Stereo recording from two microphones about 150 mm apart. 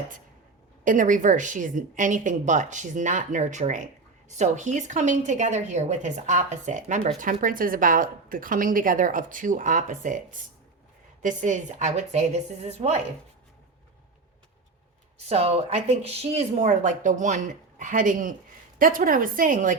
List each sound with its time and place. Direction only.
0.9 s a woman's voice: 60° right (ahead or behind)
7.4 s speech: 65° right (ahead or behind)
11.2 s a woman's voice: 55° right (ahead or behind)
15.3 s a woman's voice: 45° right (ahead or behind); by 19.7 s 65° right (ahead or behind)